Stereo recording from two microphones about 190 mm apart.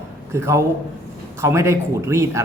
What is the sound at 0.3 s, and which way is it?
Speech, 15° right (ahead or behind).